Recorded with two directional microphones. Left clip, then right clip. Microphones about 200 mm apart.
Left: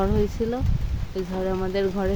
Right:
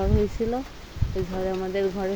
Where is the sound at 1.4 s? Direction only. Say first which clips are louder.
Left 1 dB; 25° left (ahead or behind).